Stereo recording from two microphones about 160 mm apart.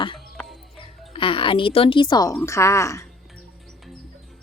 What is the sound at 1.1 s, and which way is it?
A woman's voice, 35° left (ahead or behind).